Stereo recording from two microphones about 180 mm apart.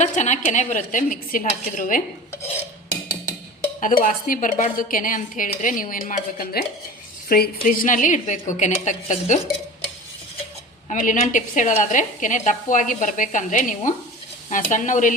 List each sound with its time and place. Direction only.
0.0 s a woman's voice: 40° left (ahead or behind)
4.0 s a woman's voice: 45° left (ahead or behind)
10.8 s a woman's voice: 45° left (ahead or behind)